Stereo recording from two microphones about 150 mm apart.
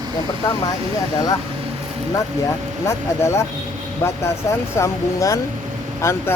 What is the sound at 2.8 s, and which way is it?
Speech, 20° left (ahead or behind).